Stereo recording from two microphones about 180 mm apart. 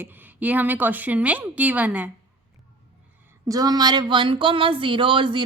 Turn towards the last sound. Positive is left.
turn(degrees=-25)  # may be behind; listen again after turning